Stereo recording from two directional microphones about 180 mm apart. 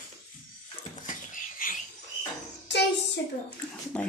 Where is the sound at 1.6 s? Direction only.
50° left (ahead or behind).